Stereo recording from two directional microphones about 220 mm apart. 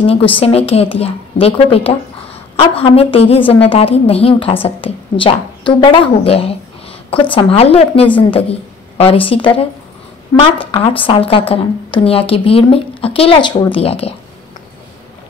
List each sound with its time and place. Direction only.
0.3 s a woman's voice: 25° left (ahead or behind)